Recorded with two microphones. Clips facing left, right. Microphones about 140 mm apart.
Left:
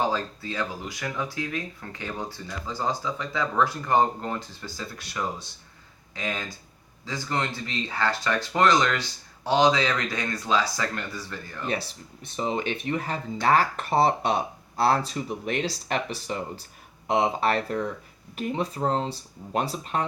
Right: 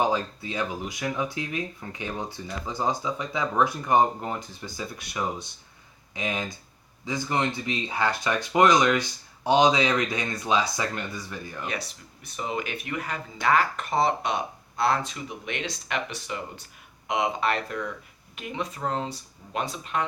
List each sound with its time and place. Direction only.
0.0 s speech: 15° right (ahead or behind)
12.2 s speech: 30° left (ahead or behind)